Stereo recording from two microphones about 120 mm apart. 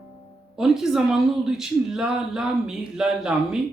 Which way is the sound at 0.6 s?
5° right (ahead or behind).